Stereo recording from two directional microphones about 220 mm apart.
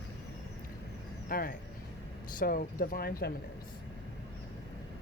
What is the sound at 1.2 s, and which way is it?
Speech, 40° left (ahead or behind).